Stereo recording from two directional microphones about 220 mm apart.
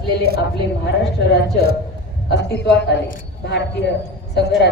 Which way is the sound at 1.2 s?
50° left (ahead or behind).